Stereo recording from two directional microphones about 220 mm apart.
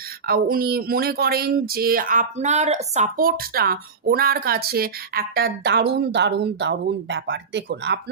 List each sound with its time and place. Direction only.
0.3 s speech: 45° right (ahead or behind)